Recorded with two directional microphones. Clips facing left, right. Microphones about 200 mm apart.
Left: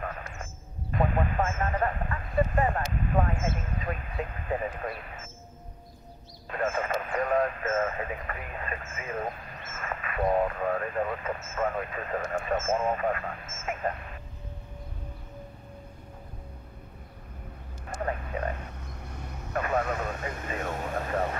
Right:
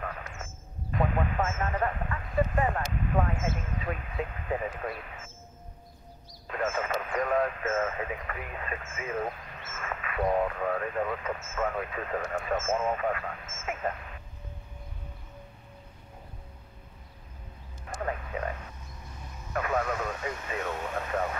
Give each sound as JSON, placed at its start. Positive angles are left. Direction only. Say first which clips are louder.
{"t": 0.1, "sound": "a sound", "louder": "left 1 dB", "side_deg": 40}
{"t": 0.9, "sound": "vehicle", "louder": "left 1 dB", "side_deg": 40}
{"t": 6.6, "sound": "radio", "louder": "left 1 dB", "side_deg": 40}
{"t": 17.9, "sound": "a sound", "louder": "left 1 dB", "side_deg": 35}
{"t": 19.8, "sound": "vehicle", "louder": "left 1 dB", "side_deg": 25}
{"t": 20.2, "sound": "vehicle", "louder": "even", "side_deg": 40}